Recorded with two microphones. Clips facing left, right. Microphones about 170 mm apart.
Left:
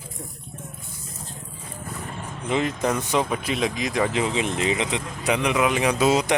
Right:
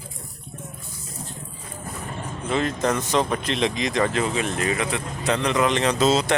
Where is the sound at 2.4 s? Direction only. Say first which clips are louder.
Even; 15° left (ahead or behind).